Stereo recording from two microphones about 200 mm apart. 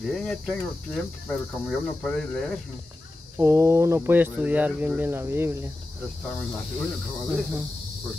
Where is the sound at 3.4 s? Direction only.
15° right (ahead or behind).